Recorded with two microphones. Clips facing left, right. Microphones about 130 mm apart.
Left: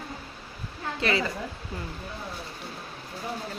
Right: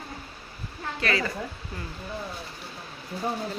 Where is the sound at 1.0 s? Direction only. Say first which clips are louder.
Left 1 dB; 20° left (ahead or behind).